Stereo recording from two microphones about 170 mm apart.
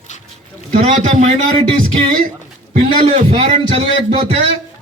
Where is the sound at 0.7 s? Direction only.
35° right (ahead or behind).